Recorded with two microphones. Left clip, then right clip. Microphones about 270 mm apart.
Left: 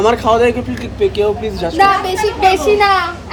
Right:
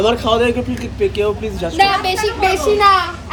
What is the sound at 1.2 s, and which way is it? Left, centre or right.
A man's voice, centre.